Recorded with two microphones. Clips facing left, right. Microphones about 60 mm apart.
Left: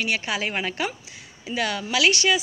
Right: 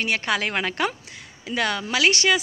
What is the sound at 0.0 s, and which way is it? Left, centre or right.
Speech, right.